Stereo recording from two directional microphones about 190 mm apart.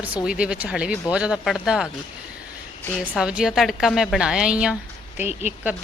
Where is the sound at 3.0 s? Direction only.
5° right (ahead or behind).